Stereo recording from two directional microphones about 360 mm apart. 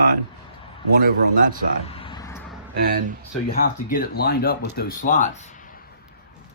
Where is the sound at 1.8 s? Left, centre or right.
Centre.